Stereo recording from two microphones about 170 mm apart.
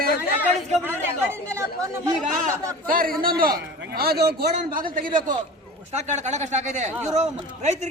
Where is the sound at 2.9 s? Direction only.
55° right (ahead or behind).